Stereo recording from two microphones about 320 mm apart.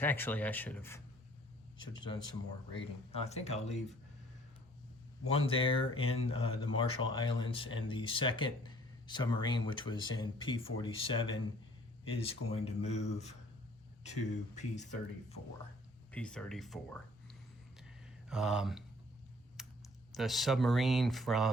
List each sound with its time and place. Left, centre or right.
0.0 s speech: centre
5.3 s speech: centre
16.1 s speech: centre
17.7 s a sound: centre
19.6 s typing: centre
20.1 s speech: centre